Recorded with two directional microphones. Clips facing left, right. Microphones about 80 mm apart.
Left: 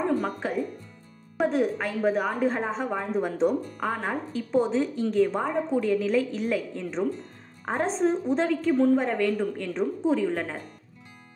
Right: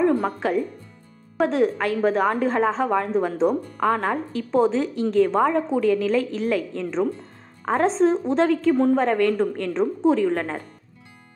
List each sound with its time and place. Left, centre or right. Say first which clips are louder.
0.2 s a woman's voice: right 5 dB; right
8.7 s a woman's voice: right 3 dB; right